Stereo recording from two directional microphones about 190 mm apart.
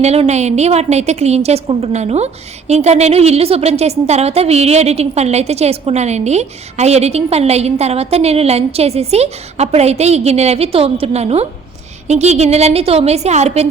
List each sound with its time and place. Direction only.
0.0 s a woman's voice: 35° right (ahead or behind)